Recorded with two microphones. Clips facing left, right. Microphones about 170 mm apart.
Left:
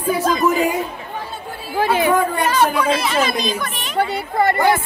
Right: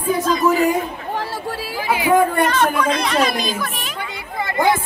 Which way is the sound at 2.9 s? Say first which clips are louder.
Even; 5° left (ahead or behind).